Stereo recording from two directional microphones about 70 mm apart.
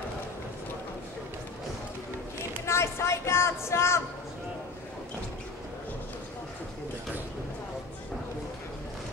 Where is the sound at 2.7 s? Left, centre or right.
Left.